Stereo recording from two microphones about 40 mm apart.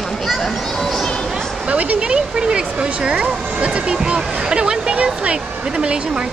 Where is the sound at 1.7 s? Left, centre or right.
Right.